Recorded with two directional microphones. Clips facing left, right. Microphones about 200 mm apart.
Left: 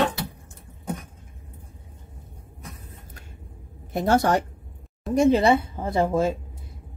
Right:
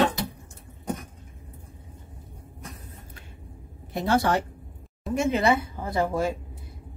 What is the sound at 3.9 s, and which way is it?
Speech, 45° left (ahead or behind).